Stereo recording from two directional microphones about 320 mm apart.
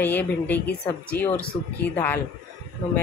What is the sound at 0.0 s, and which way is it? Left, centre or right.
A woman's voice, centre.